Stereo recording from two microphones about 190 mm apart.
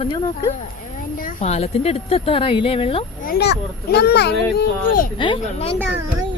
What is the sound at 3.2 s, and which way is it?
Speech, 55° left (ahead or behind).